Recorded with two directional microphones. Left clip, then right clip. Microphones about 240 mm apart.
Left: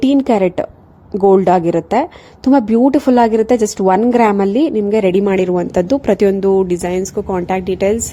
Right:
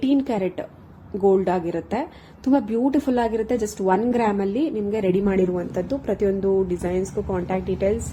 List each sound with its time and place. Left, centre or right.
0.0 s a woman's voice: left